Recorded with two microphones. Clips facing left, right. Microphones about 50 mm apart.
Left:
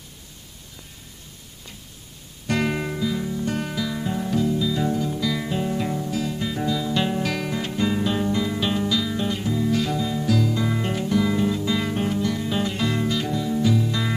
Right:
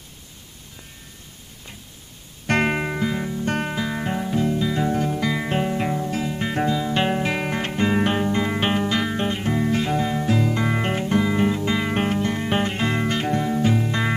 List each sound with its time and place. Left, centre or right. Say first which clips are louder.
2.4 s music: right 3 dB; right
5.7 s music: right 2 dB; right
6.3 s music: right 3 dB; right
7.4 s music: right 2 dB; right
11.3 s guitar: right 2 dB; right
11.9 s music: right 2 dB; right